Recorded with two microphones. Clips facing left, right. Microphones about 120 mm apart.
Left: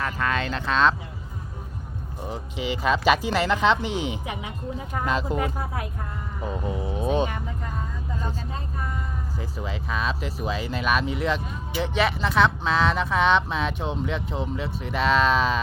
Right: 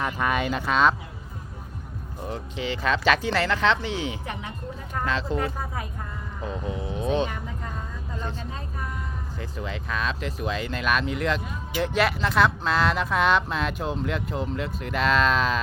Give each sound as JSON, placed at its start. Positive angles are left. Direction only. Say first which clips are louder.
{"t": 0.0, "sound": "speech", "louder": "right 1 dB", "side_deg": -15}
{"t": 2.2, "sound": "speech", "louder": "left 1 dB", "side_deg": 5}
{"t": 6.7, "sound": "speech", "louder": "left 2 dB", "side_deg": 30}
{"t": 7.0, "sound": "speech", "louder": "left 1 dB", "side_deg": 10}
{"t": 9.4, "sound": "speech", "louder": "right 1 dB", "side_deg": 5}